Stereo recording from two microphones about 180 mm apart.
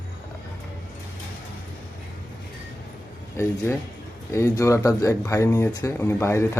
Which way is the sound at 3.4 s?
15° left (ahead or behind).